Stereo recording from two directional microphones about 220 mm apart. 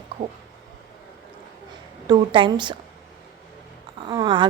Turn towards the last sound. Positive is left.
turn(degrees=-20)  # may be behind; listen again after turning